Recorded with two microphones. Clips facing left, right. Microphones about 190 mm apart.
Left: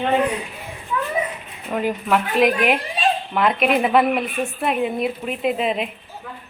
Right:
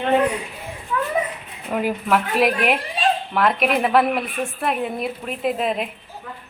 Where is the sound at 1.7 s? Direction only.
5° right (ahead or behind).